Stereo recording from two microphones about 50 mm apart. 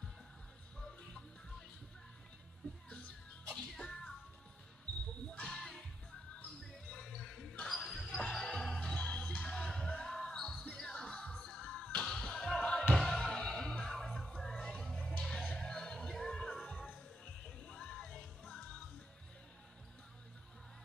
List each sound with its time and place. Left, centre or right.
2.9 s music: left
3.7 s music: centre
5.4 s music: centre
6.9 s music: centre
7.6 s a sound: centre
8.5 s music: left
12.2 s basketball bounce: centre
12.9 s music: centre